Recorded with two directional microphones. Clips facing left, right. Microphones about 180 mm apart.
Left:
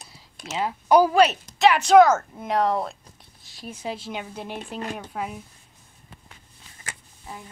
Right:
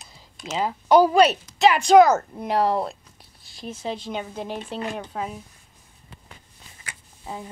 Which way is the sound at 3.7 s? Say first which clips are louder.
Right 2 dB; 10° left (ahead or behind).